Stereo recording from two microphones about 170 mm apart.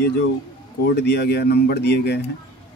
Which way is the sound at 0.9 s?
80° left.